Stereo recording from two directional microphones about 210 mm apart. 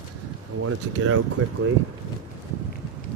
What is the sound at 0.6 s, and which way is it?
Speech, 90° right.